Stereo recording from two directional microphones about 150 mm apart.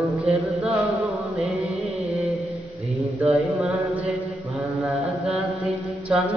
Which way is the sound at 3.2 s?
5° right (ahead or behind).